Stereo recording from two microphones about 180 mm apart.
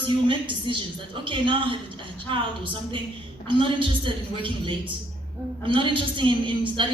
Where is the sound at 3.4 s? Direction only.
30° right (ahead or behind).